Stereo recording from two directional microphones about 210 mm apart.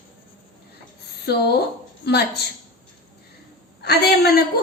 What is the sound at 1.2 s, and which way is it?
A woman's voice, 50° left (ahead or behind).